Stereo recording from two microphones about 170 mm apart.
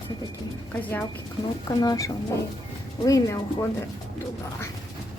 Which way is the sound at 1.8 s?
20° left (ahead or behind).